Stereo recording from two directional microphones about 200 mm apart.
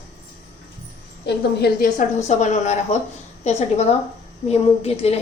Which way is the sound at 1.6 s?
45° left (ahead or behind).